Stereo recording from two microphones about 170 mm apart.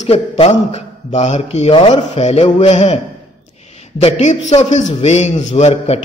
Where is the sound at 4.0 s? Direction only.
40° left (ahead or behind).